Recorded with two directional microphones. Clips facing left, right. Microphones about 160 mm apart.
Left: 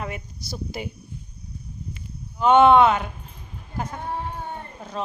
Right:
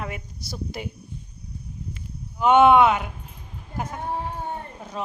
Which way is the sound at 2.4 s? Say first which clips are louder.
Left 1 dB; 15° right (ahead or behind).